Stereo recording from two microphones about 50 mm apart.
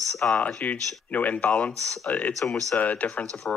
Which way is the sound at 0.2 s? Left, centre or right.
Left.